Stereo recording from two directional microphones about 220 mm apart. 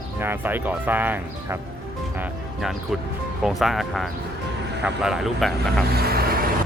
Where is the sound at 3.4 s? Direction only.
Centre (ahead or behind).